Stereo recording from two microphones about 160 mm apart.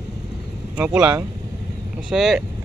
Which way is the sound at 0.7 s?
5° right (ahead or behind).